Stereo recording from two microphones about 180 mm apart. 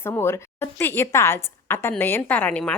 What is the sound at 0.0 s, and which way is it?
A woman's voice, 15° left (ahead or behind).